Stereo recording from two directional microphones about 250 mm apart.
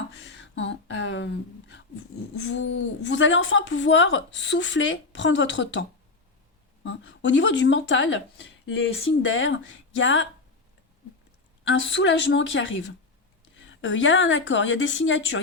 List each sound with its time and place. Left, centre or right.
0.2 s a sound: left
2.3 s a woman's voice: left
6.8 s a woman's voice: left
11.6 s a woman's voice: left